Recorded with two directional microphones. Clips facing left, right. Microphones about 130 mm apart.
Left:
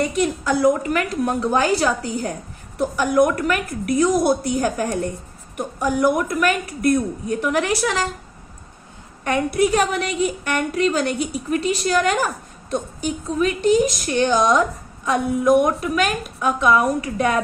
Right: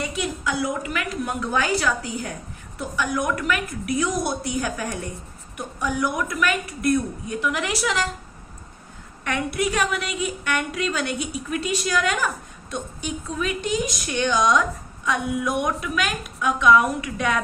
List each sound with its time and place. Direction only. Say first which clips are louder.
0.0 s a woman's voice: left 6 dB; 45° left (ahead or behind)
9.2 s a woman's voice: left 6 dB; 40° left (ahead or behind)